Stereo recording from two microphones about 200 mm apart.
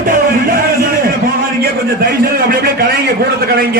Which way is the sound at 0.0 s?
45° right (ahead or behind).